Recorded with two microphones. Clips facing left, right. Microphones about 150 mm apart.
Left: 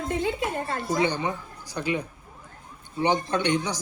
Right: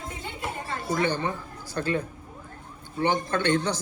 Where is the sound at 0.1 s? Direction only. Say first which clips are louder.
Left 12 dB; 85° left.